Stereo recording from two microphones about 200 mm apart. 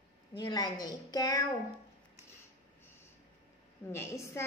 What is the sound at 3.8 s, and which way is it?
Speech, 15° left (ahead or behind).